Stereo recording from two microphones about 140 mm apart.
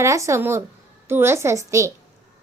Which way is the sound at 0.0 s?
20° right (ahead or behind).